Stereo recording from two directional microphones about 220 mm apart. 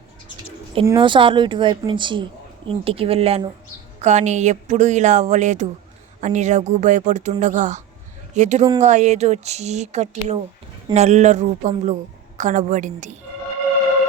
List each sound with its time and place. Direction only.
0.9 s speech: 20° right (ahead or behind)